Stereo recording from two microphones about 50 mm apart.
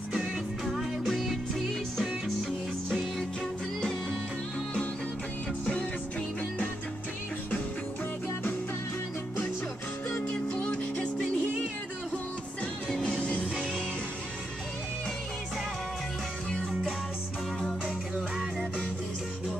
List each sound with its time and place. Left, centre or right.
1.0 s music: centre
10.5 s music: left
13.0 s music: left
16.4 s music: centre
18.1 s music: centre